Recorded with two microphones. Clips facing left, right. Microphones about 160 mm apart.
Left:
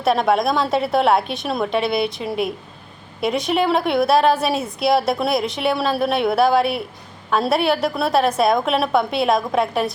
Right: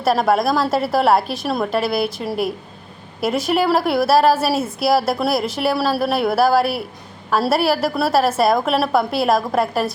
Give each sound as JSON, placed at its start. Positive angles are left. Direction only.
{"t": 0.0, "sound": "a woman's voice", "side_deg": 0}